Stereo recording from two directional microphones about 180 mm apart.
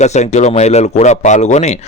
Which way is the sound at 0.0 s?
40° left (ahead or behind).